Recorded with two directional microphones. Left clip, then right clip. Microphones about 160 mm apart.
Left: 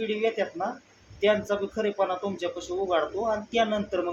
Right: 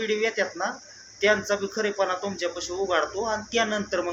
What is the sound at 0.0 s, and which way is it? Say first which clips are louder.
Speech: right 2 dB; centre (ahead or behind).